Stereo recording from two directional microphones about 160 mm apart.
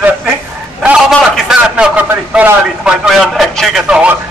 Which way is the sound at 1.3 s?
5° right (ahead or behind).